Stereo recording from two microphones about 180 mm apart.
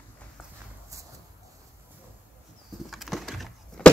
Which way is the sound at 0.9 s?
15° right (ahead or behind).